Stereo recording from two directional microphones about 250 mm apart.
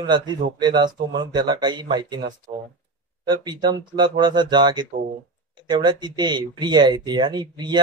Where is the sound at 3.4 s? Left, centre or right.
Centre.